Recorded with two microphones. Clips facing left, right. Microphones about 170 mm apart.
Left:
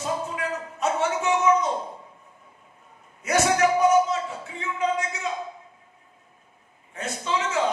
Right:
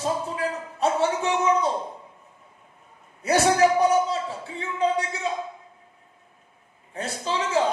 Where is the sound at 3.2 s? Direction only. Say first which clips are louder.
Right 2 dB; 30° right (ahead or behind).